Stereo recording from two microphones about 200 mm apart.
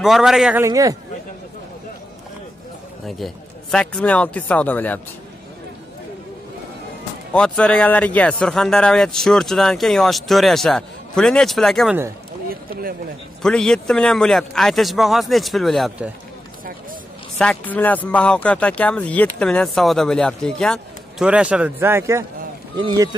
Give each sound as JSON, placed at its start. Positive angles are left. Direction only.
{"t": 0.0, "sound": "speech", "side_deg": 0}
{"t": 0.7, "sound": "speech", "side_deg": -15}
{"t": 3.7, "sound": "speech", "side_deg": 5}
{"t": 7.3, "sound": "speech", "side_deg": 5}
{"t": 13.4, "sound": "speech", "side_deg": 5}
{"t": 17.4, "sound": "speech", "side_deg": 5}